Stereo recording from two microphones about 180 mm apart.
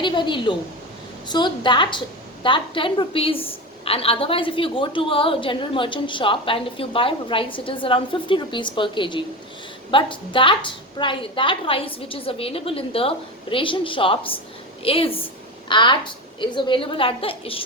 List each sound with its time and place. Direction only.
0.0 s a woman's voice: 25° left (ahead or behind)